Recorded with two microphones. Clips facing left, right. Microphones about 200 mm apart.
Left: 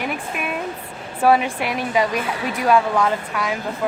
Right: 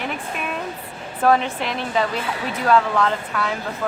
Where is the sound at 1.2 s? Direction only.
10° left (ahead or behind).